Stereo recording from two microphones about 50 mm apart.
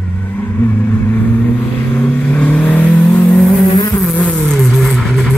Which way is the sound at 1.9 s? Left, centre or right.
Left.